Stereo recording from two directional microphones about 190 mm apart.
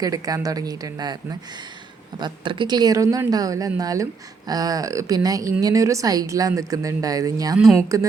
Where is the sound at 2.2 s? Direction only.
25° right (ahead or behind).